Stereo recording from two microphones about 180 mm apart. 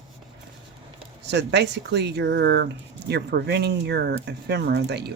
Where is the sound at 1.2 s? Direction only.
70° right (ahead or behind).